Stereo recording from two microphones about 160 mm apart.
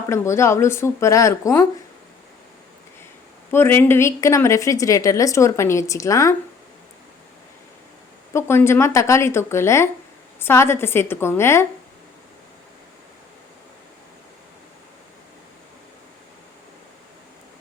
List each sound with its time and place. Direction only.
0.1 s speech: 15° left (ahead or behind)
3.5 s a woman's voice: 15° left (ahead or behind)
8.3 s speech: 15° left (ahead or behind)